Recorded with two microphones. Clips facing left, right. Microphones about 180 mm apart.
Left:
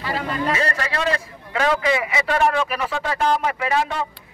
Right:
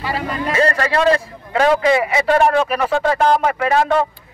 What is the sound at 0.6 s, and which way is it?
Speech, 50° right (ahead or behind).